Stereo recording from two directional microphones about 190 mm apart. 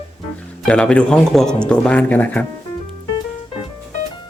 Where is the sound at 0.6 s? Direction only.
5° left (ahead or behind).